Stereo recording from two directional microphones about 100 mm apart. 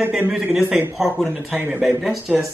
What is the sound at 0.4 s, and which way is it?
Speech, 15° right (ahead or behind).